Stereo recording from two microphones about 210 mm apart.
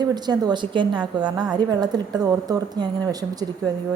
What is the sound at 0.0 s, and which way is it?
A woman's voice, 20° right (ahead or behind).